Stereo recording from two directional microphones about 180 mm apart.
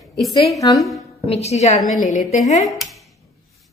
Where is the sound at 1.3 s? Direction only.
35° left (ahead or behind).